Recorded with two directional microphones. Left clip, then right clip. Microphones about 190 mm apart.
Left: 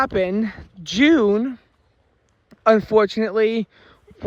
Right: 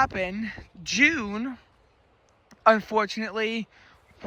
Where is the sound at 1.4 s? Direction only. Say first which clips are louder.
Left 8 dB; 25° left (ahead or behind).